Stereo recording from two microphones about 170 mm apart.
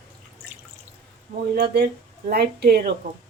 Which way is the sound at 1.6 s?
70° right (ahead or behind).